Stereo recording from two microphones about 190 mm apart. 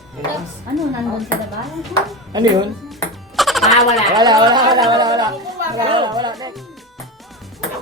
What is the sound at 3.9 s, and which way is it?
Speech, centre (ahead or behind).